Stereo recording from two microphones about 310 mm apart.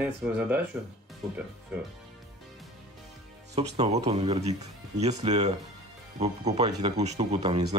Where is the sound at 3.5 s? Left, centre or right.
Right.